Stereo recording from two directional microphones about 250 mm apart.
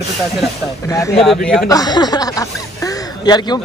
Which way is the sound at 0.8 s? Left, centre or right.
Centre.